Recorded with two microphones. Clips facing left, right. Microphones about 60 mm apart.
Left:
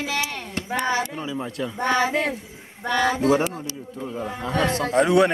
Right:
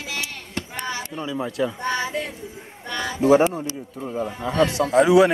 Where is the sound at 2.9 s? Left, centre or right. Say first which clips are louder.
Left 7 dB; left.